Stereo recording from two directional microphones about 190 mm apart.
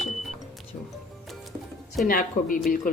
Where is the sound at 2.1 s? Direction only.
45° left (ahead or behind).